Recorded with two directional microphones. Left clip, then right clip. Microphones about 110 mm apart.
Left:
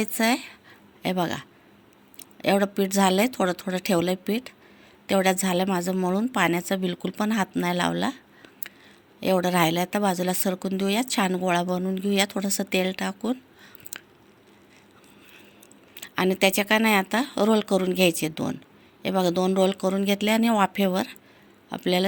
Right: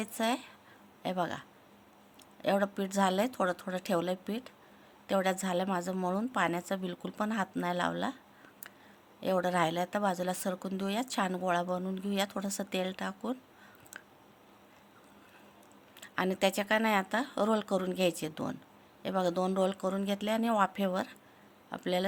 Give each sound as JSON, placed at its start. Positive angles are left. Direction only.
{"t": 0.0, "sound": "speech", "side_deg": 25}
{"t": 7.6, "sound": "a sound", "side_deg": 20}
{"t": 9.2, "sound": "speech", "side_deg": 20}
{"t": 13.9, "sound": "scissors", "side_deg": 25}
{"t": 16.0, "sound": "speech", "side_deg": 20}